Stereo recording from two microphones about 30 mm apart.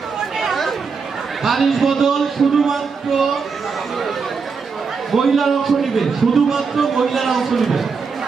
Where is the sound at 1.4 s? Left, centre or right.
Centre.